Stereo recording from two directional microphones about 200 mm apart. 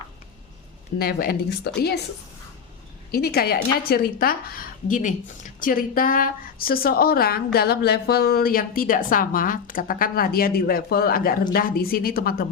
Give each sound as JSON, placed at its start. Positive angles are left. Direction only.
{"t": 0.9, "sound": "a woman's voice", "side_deg": 50}
{"t": 3.1, "sound": "a woman's voice", "side_deg": 50}